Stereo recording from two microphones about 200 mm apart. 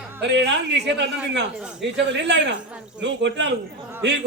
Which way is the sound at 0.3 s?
60° right (ahead or behind).